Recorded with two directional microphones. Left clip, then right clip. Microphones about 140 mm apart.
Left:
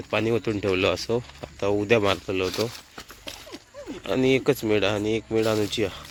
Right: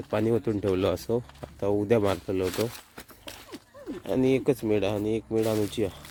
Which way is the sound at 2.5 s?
Centre (ahead or behind).